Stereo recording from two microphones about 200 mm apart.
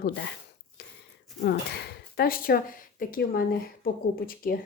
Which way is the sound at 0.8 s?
55° left (ahead or behind).